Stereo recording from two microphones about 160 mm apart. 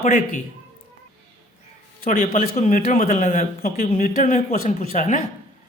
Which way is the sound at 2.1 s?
60° left (ahead or behind).